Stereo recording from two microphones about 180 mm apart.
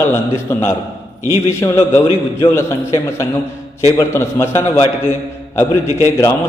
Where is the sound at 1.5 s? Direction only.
15° left (ahead or behind).